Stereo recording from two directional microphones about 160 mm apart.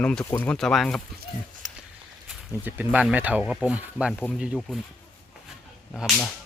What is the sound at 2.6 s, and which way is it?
Speech, 10° right (ahead or behind).